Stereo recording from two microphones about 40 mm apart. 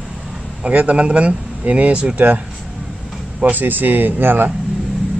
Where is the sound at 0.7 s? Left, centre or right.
Right.